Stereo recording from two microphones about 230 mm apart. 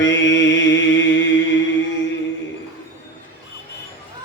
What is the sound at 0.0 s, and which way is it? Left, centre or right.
Mantra, left.